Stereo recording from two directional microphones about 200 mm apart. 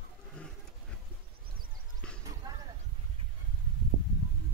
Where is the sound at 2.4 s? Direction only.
15° right (ahead or behind).